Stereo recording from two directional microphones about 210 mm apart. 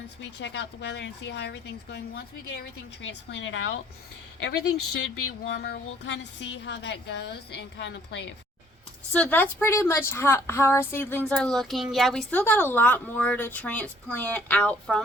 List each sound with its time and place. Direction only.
0.3 s a woman's voice: 55° left (ahead or behind)
9.1 s a woman's voice: 5° left (ahead or behind)